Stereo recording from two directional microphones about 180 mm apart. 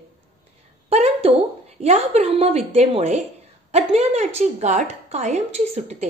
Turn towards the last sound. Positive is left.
turn(degrees=-35)  # may be behind; listen again after turning